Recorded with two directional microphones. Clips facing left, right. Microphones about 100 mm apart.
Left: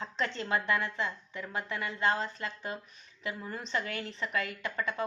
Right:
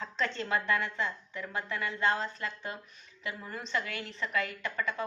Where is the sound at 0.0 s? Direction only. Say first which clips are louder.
Right 1 dB; 25° left (ahead or behind).